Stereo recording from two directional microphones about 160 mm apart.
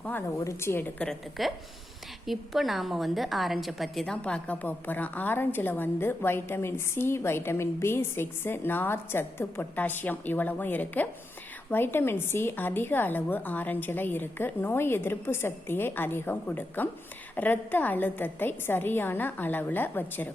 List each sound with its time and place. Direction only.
0.0 s a woman's voice: 10° left (ahead or behind)